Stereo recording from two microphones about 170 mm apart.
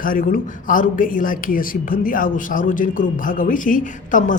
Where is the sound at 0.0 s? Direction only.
55° left (ahead or behind).